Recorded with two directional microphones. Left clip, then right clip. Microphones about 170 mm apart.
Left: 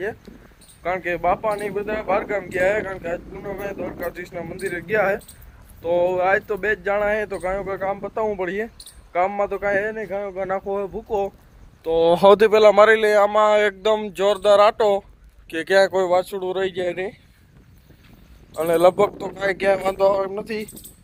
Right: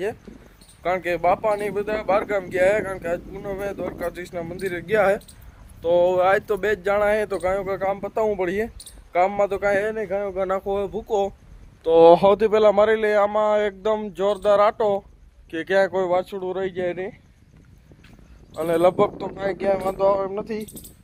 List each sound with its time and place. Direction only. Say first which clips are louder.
0.8 s speech: right 1 dB; 20° right (ahead or behind)
10.7 s speech: right 1 dB; 10° right (ahead or behind)
11.9 s speech: right 5 dB; 60° right (ahead or behind)
12.3 s a man's voice: left 4 dB; 30° left (ahead or behind)
13.1 s speech: left 3 dB; 50° left (ahead or behind)
18.5 s a man's voice: left 3 dB; 35° left (ahead or behind)